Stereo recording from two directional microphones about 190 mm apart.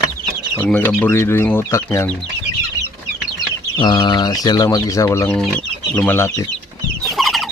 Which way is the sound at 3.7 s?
25° left (ahead or behind).